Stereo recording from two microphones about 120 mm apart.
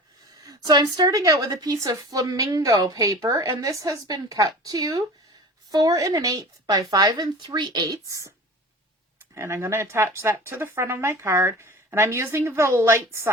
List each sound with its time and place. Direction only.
0.4 s a woman's voice: 35° right (ahead or behind)
9.3 s speech: 20° right (ahead or behind)